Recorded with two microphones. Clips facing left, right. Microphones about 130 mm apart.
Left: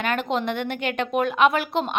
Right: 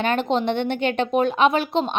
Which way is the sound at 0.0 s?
30° right (ahead or behind).